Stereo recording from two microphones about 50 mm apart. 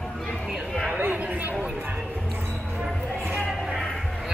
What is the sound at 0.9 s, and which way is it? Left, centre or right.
Speech, right.